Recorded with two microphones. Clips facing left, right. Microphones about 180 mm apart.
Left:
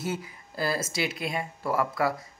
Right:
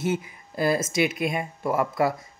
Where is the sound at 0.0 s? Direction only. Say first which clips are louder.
Right 6 dB; 20° right (ahead or behind).